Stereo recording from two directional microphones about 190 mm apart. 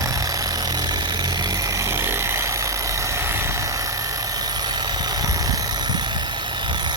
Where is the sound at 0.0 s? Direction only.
20° right (ahead or behind).